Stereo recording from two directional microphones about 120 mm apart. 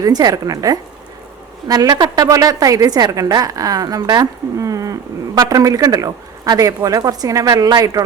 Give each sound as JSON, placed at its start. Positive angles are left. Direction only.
{"t": 0.0, "sound": "a woman's voice", "side_deg": -35}